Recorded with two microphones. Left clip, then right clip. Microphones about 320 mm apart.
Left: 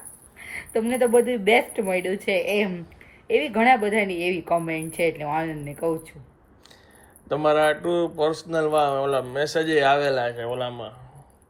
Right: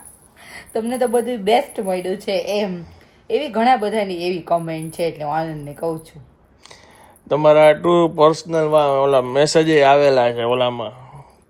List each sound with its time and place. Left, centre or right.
0.5 s a sound: centre
1.5 s a woman's voice: centre
7.3 s speech: centre